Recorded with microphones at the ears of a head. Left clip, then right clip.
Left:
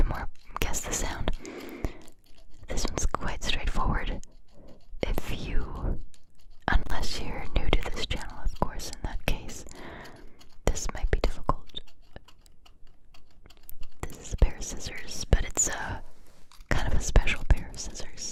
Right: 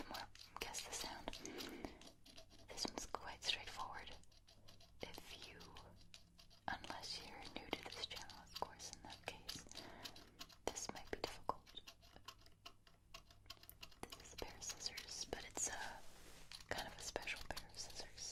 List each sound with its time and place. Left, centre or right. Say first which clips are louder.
0.0 s whispering: left 15 dB; left
14.0 s whispering: left 16 dB; left